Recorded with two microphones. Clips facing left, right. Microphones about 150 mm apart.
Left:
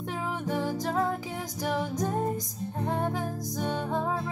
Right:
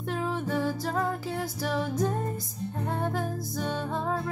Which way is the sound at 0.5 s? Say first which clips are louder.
Even; 15° left (ahead or behind).